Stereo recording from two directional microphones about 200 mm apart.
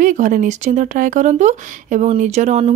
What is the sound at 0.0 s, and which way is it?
Speech, 40° right (ahead or behind).